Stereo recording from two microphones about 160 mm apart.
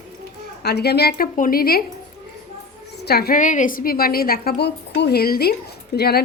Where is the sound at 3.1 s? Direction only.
75° left (ahead or behind).